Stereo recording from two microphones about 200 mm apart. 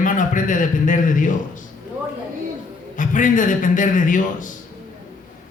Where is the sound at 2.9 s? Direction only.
40° left (ahead or behind).